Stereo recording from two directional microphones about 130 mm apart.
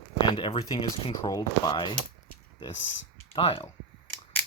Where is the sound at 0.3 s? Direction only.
40° left (ahead or behind).